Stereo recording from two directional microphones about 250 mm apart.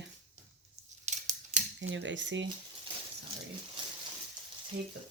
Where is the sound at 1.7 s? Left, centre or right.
Right.